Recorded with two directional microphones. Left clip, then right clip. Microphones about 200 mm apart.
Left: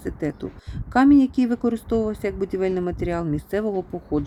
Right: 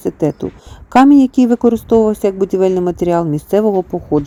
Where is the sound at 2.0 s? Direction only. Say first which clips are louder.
Right 12 dB; 30° right (ahead or behind).